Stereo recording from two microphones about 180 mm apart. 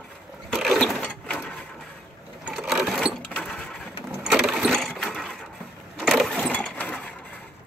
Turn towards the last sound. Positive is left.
turn(degrees=5)  # may be behind; listen again after turning